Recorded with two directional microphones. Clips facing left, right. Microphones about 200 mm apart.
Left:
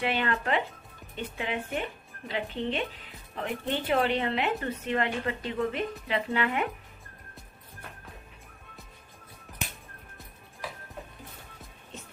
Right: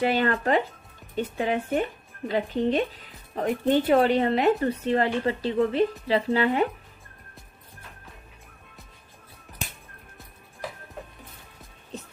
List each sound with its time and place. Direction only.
0.0 s speech: 40° right (ahead or behind)